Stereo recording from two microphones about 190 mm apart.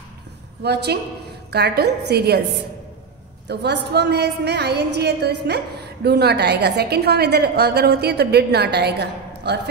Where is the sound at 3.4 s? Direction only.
60° right (ahead or behind).